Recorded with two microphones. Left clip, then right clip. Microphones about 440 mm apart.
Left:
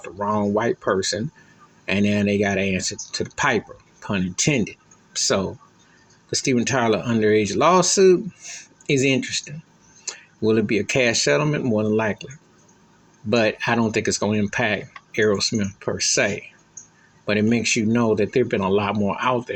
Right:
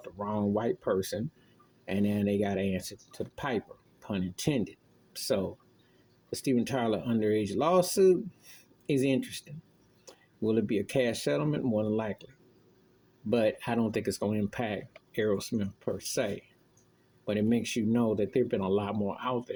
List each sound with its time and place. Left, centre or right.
0.0 s speech: right
6.3 s speech: right
13.3 s speech: right